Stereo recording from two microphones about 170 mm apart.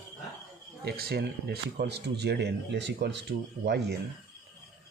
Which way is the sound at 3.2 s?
80° right.